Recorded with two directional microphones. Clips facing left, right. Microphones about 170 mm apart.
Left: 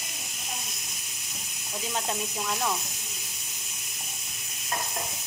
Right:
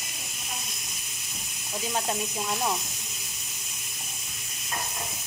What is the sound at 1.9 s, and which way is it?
Speech, 15° right (ahead or behind).